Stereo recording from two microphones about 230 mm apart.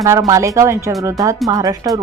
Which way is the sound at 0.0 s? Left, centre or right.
Centre.